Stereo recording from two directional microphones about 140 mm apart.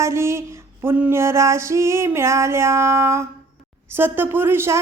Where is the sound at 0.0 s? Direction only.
20° right (ahead or behind).